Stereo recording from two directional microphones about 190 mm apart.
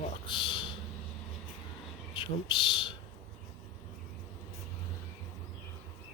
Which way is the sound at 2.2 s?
25° left (ahead or behind).